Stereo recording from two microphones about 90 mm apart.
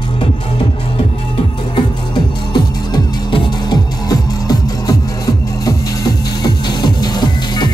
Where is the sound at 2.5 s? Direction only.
65° left (ahead or behind).